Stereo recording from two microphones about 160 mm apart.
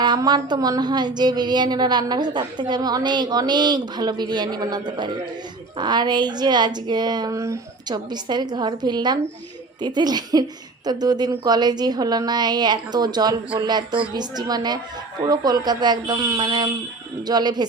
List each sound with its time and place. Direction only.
0.0 s speech: 25° right (ahead or behind)